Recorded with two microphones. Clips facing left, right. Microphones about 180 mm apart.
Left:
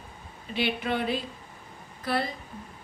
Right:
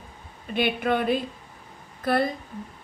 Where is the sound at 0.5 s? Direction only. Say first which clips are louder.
Right 4 dB; 50° right (ahead or behind).